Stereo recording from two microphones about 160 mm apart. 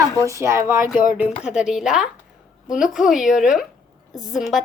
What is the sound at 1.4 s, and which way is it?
Speech, 5° right (ahead or behind).